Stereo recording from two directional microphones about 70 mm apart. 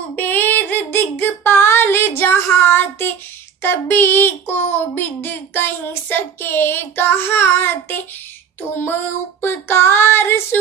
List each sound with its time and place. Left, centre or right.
0.1 s a sound: left
3.6 s speech: left
9.4 s speech: left